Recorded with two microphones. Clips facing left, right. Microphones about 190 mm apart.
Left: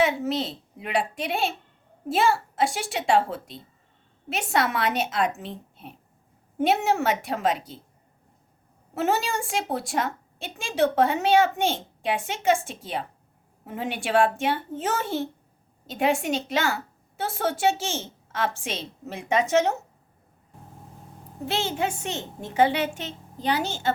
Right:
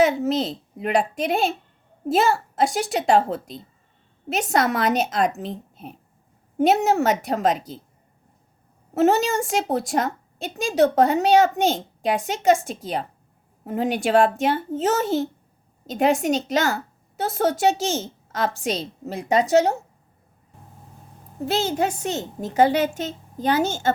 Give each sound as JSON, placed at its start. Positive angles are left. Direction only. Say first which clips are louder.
{"t": 0.0, "sound": "a woman's voice", "louder": "right 4 dB", "side_deg": -40}
{"t": 9.0, "sound": "a woman's voice", "louder": "right 7 dB", "side_deg": -40}
{"t": 21.4, "sound": "a woman's voice", "louder": "right 4 dB", "side_deg": -40}